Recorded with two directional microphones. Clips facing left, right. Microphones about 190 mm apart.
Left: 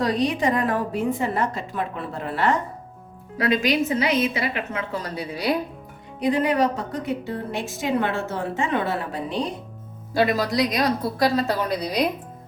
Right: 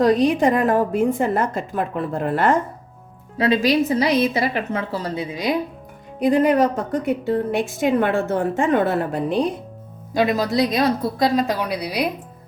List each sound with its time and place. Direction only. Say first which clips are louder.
0.0 s a woman's voice: right 6 dB; 50° right (ahead or behind)
3.3 s a woman's voice: right 4 dB; 30° right (ahead or behind)
6.1 s a woman's voice: right 5 dB; 50° right (ahead or behind)
10.2 s a woman's voice: right 2 dB; 20° right (ahead or behind)